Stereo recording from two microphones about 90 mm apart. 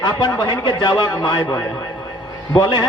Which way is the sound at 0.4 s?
55° left (ahead or behind).